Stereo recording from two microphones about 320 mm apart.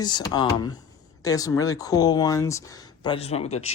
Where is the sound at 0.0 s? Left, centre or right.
Centre.